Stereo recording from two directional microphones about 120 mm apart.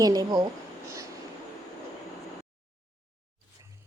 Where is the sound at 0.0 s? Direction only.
30° right (ahead or behind).